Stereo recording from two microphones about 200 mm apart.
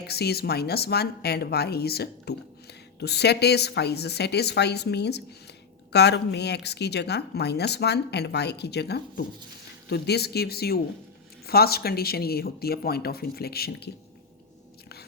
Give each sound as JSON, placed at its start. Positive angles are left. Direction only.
{"t": 0.1, "sound": "speech", "side_deg": 55}